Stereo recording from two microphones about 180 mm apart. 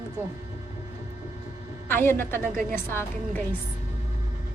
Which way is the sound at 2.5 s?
50° right (ahead or behind).